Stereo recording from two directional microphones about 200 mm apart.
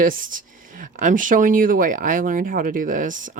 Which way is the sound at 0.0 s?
45° right (ahead or behind).